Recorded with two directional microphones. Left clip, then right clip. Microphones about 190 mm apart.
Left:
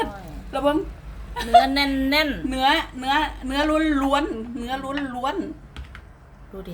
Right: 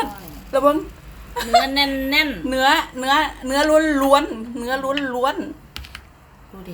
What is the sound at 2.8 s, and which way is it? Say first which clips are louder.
A woman's voice: right 4 dB; 20° right (ahead or behind).